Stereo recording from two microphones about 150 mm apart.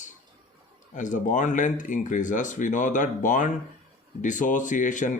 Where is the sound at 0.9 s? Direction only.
55° left (ahead or behind).